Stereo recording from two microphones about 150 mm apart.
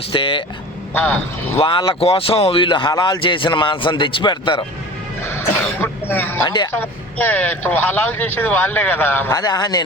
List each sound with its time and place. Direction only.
0.1 s speech: 35° left (ahead or behind)
0.9 s speech: 10° left (ahead or behind)
1.5 s speech: 30° left (ahead or behind)
5.2 s throat clearing: 15° left (ahead or behind)
6.4 s speech: 30° left (ahead or behind)
6.7 s speech: 15° left (ahead or behind)
9.4 s speech: 30° left (ahead or behind)